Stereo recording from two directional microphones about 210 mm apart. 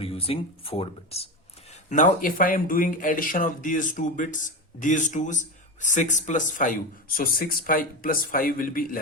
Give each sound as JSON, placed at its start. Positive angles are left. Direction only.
{"t": 0.0, "sound": "speech", "side_deg": 25}